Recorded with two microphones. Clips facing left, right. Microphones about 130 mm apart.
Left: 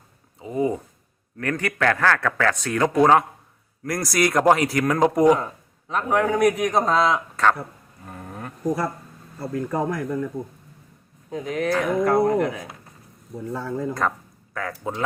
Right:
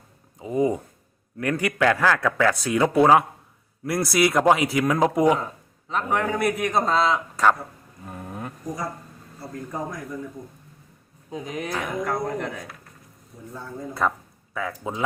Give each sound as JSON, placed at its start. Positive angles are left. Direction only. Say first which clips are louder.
{"t": 0.3, "sound": "a man's voice", "louder": "right 1 dB", "side_deg": -15}
{"t": 8.0, "sound": "a sound", "louder": "right 1 dB", "side_deg": -5}
{"t": 9.4, "sound": "speech", "louder": "left 7 dB", "side_deg": 70}
{"t": 11.3, "sound": "a man's voice", "louder": "left 5 dB", "side_deg": -15}
{"t": 11.7, "sound": "speech", "louder": "left 8 dB", "side_deg": 0}
{"t": 13.3, "sound": "speech", "louder": "left 9 dB", "side_deg": 75}
{"t": 14.5, "sound": "speech", "louder": "even", "side_deg": -5}